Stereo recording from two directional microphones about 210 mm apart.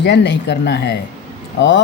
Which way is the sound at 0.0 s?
55° left (ahead or behind).